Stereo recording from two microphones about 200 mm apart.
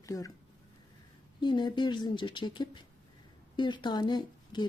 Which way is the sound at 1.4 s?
20° left (ahead or behind).